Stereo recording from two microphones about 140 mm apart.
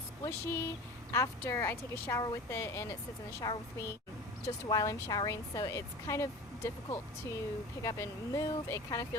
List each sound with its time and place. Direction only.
0.3 s speech: 15° left (ahead or behind)